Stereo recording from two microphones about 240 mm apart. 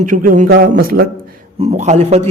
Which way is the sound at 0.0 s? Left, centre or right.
Right.